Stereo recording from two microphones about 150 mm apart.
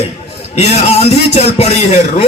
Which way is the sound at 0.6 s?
45° left (ahead or behind).